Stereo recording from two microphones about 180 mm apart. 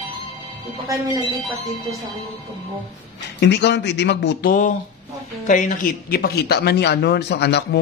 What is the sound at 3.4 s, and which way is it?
Speech, 70° left (ahead or behind).